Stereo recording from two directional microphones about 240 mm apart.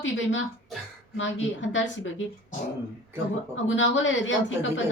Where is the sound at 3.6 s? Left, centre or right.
Left.